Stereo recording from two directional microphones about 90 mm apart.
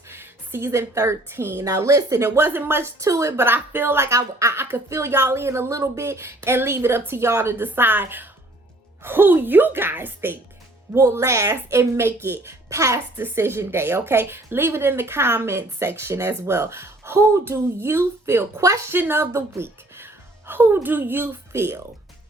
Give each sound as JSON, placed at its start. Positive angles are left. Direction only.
{"t": 0.1, "sound": "a woman's voice", "side_deg": -25}